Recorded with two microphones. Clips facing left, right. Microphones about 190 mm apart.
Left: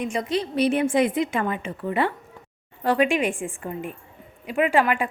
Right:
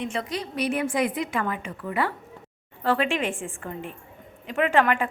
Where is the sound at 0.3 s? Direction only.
30° left (ahead or behind).